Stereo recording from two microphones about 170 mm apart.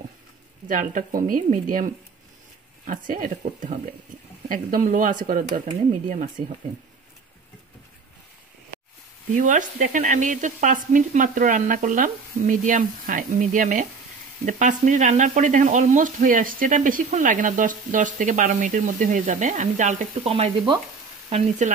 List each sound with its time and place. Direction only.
0.7 s speech: 50° right (ahead or behind)
2.9 s speech: 50° right (ahead or behind)
9.3 s speech: 50° right (ahead or behind); by 20.8 s 30° right (ahead or behind)
21.3 s speech: 45° right (ahead or behind)